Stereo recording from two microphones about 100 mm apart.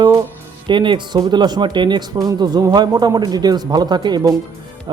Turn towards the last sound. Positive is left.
turn(degrees=-40)  # may be behind; listen again after turning